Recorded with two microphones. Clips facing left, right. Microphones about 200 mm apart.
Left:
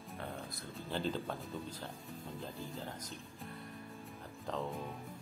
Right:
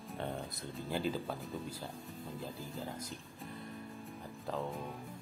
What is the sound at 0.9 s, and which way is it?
Speech, 5° right (ahead or behind).